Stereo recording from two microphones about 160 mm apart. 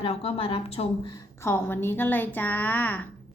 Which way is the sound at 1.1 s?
20° left (ahead or behind).